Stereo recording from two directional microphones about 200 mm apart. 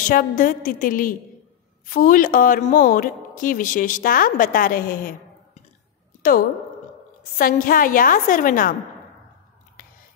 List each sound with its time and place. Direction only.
0.1 s a woman's voice: 45° left (ahead or behind)
7.3 s a woman's voice: 45° left (ahead or behind)